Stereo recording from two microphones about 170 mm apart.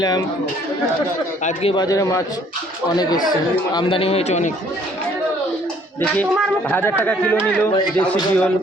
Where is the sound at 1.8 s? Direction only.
20° left (ahead or behind).